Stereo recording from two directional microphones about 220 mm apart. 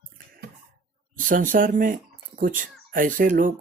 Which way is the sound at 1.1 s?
40° right (ahead or behind).